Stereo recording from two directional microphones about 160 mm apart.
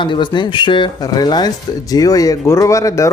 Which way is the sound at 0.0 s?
30° left (ahead or behind).